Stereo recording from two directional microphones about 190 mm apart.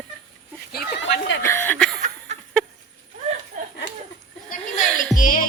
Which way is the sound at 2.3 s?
35° right (ahead or behind).